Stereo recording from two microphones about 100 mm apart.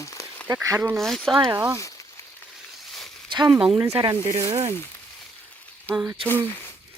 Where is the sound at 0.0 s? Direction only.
35° left (ahead or behind).